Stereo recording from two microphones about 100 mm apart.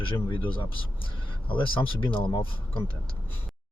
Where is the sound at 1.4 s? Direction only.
55° left (ahead or behind).